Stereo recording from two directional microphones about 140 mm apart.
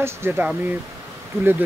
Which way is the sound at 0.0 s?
15° right (ahead or behind).